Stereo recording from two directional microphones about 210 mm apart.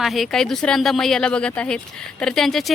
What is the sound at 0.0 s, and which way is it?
Speech, centre (ahead or behind).